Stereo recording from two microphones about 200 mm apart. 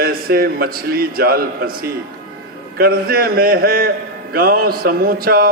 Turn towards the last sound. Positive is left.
turn(degrees=-50)  # may be behind; listen again after turning